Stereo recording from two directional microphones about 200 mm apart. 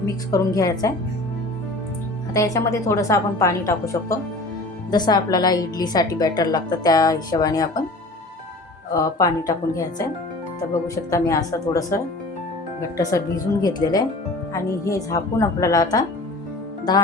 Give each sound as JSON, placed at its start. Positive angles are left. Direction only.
{"t": 0.0, "sound": "a woman's voice", "side_deg": 15}
{"t": 2.3, "sound": "a woman's voice", "side_deg": 15}
{"t": 8.9, "sound": "a woman's voice", "side_deg": 15}
{"t": 10.8, "sound": "a woman's voice", "side_deg": 15}
{"t": 13.0, "sound": "a woman's voice", "side_deg": 15}